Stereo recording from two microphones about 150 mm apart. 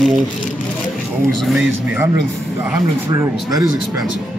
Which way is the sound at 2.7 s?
20° right (ahead or behind).